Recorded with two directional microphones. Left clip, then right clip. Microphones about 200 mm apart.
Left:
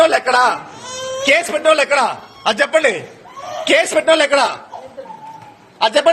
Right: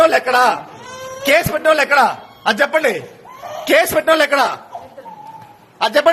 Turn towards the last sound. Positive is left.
turn(degrees=-30)  # may be behind; listen again after turning